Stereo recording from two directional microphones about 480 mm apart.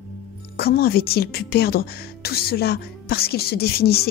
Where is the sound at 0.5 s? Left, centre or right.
Centre.